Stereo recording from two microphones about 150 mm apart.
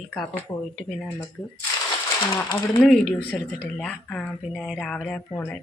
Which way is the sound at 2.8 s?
Centre (ahead or behind).